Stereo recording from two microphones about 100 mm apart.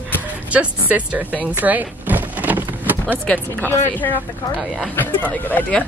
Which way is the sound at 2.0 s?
15° right (ahead or behind).